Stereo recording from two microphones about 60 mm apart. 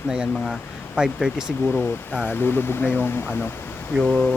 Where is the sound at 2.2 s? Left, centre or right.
Left.